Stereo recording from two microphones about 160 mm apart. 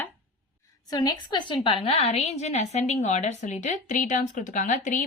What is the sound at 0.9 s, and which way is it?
A woman's voice, 25° left (ahead or behind).